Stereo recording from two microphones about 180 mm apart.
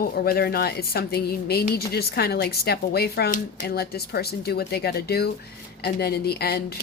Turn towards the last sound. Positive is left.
turn(degrees=60)  # may be behind; listen again after turning